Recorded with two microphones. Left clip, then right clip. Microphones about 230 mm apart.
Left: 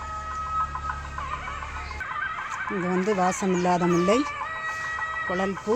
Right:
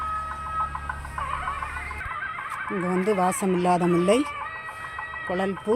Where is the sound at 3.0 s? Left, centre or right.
Centre.